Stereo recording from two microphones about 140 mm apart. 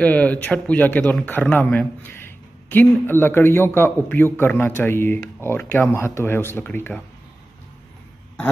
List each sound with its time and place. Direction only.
0.0 s speech: 10° left (ahead or behind)